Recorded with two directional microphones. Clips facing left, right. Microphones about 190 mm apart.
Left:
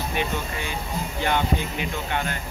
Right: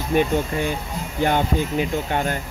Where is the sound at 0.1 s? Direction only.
45° right (ahead or behind).